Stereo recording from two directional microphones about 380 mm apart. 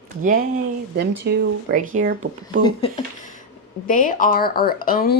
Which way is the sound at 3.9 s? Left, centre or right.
Left.